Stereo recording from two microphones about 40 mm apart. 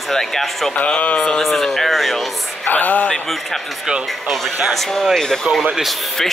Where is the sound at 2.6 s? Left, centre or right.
Left.